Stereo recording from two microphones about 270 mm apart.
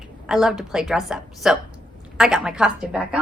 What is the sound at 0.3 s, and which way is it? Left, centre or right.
A woman's voice, centre.